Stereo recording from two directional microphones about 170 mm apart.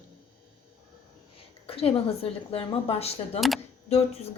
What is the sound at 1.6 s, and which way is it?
A woman's voice, 35° left (ahead or behind).